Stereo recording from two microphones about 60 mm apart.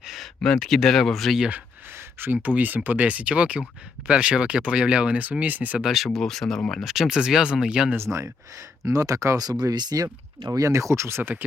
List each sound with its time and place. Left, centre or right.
0.4 s speech: centre
2.1 s speech: right
5.8 s speech: centre
6.8 s speech: centre
7.9 s speech: right
8.8 s speech: right
10.5 s speech: right
11.2 s speech: right